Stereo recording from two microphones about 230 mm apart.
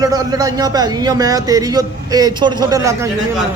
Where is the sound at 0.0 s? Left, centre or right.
Centre.